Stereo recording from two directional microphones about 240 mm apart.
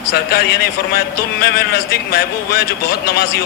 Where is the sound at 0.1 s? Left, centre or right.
Left.